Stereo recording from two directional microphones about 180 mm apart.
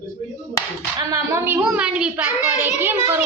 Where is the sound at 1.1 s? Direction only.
15° right (ahead or behind).